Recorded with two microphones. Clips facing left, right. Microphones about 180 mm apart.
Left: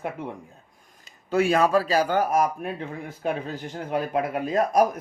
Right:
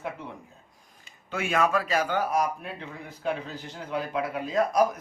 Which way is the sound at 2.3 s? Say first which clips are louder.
Left 4 dB; 50° left (ahead or behind).